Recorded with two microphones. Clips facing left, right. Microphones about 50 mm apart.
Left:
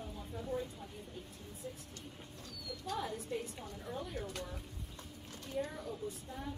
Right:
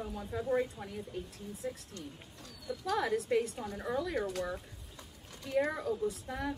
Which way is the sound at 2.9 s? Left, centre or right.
Right.